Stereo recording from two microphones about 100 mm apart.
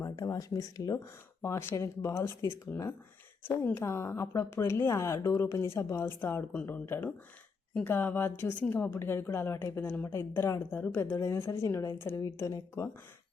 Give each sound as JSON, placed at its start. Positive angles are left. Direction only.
{"t": 0.0, "sound": "speech", "side_deg": 35}
{"t": 1.4, "sound": "a woman's voice", "side_deg": 25}